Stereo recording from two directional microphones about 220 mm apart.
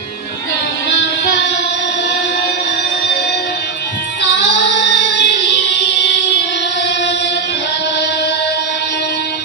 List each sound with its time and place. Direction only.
0.8 s music: 55° left (ahead or behind)
4.2 s music: 50° left (ahead or behind)